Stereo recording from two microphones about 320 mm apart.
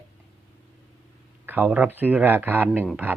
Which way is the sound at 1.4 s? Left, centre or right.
Centre.